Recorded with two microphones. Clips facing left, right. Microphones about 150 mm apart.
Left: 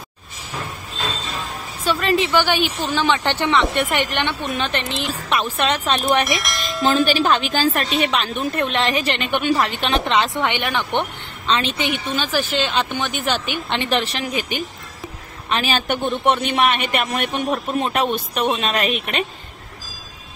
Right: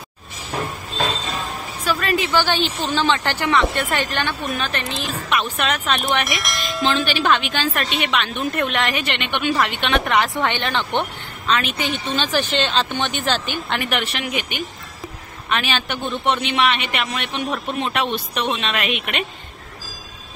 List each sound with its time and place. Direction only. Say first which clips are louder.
1.9 s a woman's voice: left 2 dB; 25° left (ahead or behind)
6.2 s bell: left 2 dB; centre (ahead or behind)
6.9 s a woman's voice: left 3 dB; 40° left (ahead or behind)
10.0 s speech: even; 20° left (ahead or behind)
11.4 s speech: left 1 dB; 30° left (ahead or behind)
11.9 s speech: even; 5° left (ahead or behind)
13.7 s a woman's voice: left 3 dB; 30° left (ahead or behind)